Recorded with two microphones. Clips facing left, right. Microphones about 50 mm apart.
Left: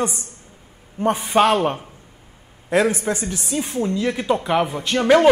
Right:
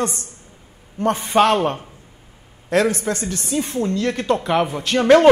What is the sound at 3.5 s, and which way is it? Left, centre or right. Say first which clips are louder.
Speech: right 1 dB; centre.